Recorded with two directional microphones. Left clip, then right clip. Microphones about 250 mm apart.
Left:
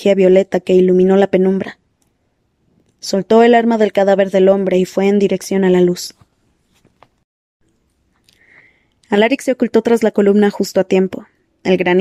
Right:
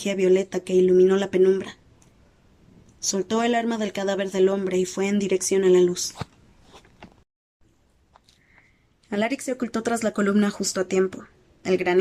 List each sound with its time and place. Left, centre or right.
0.0 s speech: left
3.1 s speech: left
9.0 s speech: left